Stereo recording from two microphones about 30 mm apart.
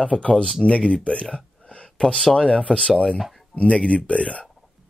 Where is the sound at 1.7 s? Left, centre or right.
Left.